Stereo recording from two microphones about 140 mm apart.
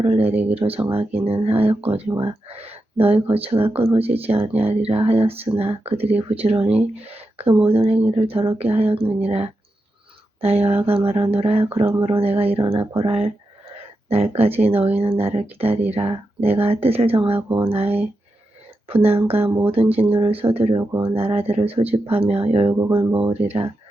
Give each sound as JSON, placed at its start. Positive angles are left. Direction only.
{"t": 0.0, "sound": "speech", "side_deg": -45}
{"t": 17.3, "sound": "speech", "side_deg": -15}
{"t": 17.7, "sound": "speech", "side_deg": -45}